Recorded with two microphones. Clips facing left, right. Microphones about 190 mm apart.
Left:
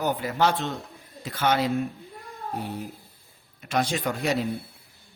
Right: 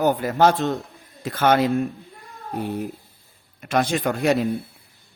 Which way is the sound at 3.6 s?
55° right (ahead or behind).